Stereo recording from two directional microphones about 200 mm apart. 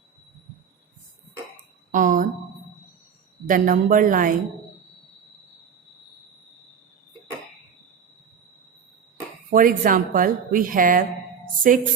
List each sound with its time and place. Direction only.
1.9 s a sound: 40° right (ahead or behind)
3.4 s a woman's voice: 40° right (ahead or behind)
9.5 s a woman's voice: 45° right (ahead or behind)